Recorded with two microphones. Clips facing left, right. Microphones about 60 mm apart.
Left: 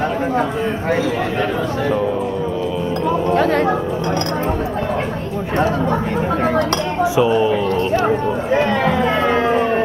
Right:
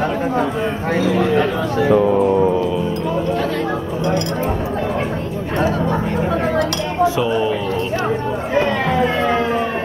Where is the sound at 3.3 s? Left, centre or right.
Left.